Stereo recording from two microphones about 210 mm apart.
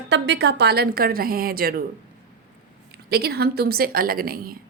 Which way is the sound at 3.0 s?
50° right (ahead or behind).